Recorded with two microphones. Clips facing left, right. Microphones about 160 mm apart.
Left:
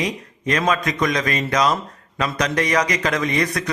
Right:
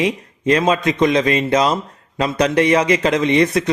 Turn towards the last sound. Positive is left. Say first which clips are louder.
# right 7 dB
turn(degrees=-25)  # may be behind; listen again after turning